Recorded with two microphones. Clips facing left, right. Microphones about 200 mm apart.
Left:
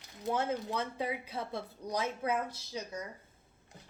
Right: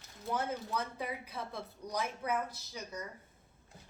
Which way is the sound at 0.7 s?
25° left (ahead or behind).